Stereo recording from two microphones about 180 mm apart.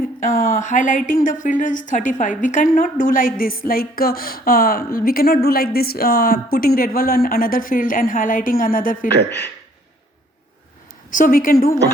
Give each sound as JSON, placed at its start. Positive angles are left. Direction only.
{"t": 0.2, "sound": "a woman's voice", "side_deg": 50}
{"t": 11.1, "sound": "a woman's voice", "side_deg": 50}